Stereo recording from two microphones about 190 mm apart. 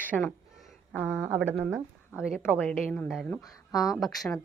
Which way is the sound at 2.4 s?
5° left (ahead or behind).